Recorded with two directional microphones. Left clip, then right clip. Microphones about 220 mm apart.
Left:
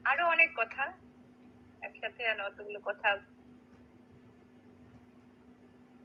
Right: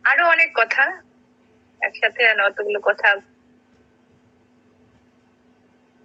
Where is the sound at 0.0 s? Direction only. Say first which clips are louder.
Right 11 dB; 45° right (ahead or behind).